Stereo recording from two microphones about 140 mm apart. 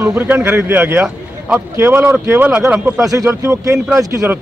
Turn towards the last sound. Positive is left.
turn(degrees=-25)  # may be behind; listen again after turning